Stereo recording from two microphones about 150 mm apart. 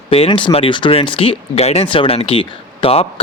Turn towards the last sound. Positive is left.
turn(degrees=40)  # may be behind; listen again after turning